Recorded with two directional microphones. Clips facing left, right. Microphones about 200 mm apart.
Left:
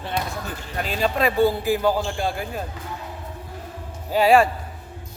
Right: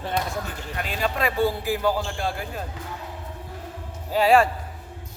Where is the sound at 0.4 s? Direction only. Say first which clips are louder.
Left 3 dB; 30° left (ahead or behind); by 2.5 s 15° left (ahead or behind).